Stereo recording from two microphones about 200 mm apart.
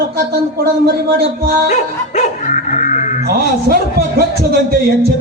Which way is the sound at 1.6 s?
40° left (ahead or behind).